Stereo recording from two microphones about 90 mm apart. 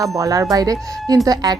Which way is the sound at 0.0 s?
40° right (ahead or behind).